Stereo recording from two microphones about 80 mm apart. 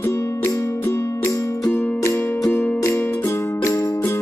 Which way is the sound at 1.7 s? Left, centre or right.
Left.